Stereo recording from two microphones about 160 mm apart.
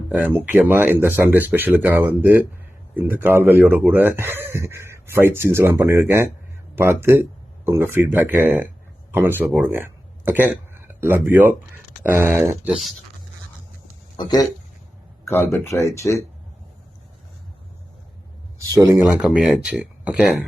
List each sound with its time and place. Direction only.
0.1 s speech: 10° right (ahead or behind)
14.2 s speech: 25° left (ahead or behind)
15.3 s speech: 15° left (ahead or behind)
18.7 s speech: 20° right (ahead or behind)